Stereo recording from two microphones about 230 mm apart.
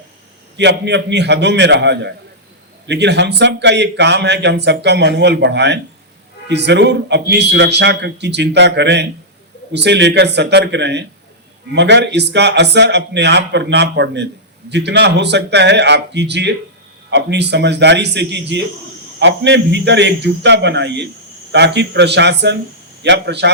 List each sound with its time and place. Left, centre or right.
0.5 s speech: right